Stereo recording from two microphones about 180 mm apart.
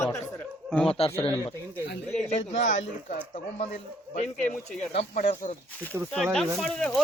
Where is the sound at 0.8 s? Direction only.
35° left (ahead or behind).